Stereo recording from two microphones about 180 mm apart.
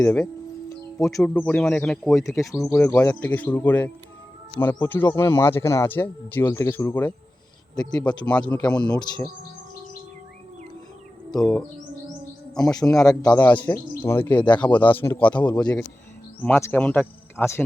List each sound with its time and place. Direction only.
0.0 s a man's voice: 5° left (ahead or behind)
2.1 s a man's voice: 15° left (ahead or behind)
11.3 s a man's voice: 5° left (ahead or behind)
12.8 s speech: 10° left (ahead or behind)
14.3 s speech: 25° left (ahead or behind)
14.6 s speech: 10° left (ahead or behind)